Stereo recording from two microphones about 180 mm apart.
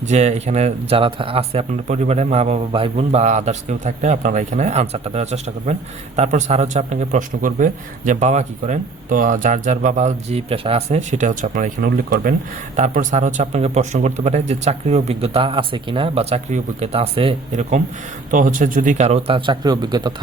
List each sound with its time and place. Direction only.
0.0 s a man's voice: 40° right (ahead or behind); by 20.1 s 25° right (ahead or behind)